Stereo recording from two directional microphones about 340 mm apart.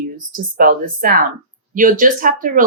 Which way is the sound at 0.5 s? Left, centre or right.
Right.